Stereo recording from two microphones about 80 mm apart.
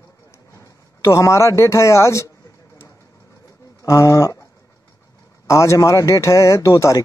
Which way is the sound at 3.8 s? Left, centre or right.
Left.